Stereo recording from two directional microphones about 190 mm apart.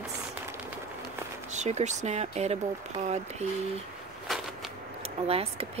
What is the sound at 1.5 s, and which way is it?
Speech, 35° right (ahead or behind).